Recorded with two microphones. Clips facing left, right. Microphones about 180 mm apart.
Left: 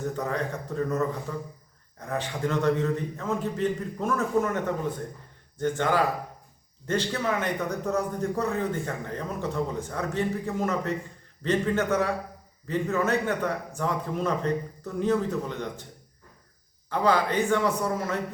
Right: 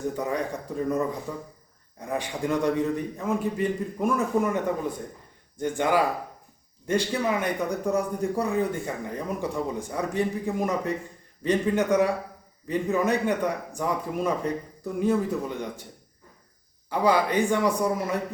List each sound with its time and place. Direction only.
0.2 s speech: 10° right (ahead or behind)
16.9 s speech: 10° right (ahead or behind)